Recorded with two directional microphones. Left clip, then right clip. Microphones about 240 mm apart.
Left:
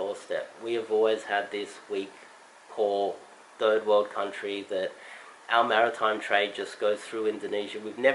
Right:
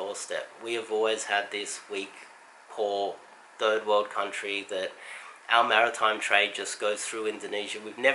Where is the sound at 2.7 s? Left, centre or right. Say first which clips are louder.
Left 2 dB; left.